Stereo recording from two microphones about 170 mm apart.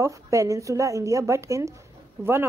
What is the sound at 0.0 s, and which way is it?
A woman's voice, 20° right (ahead or behind).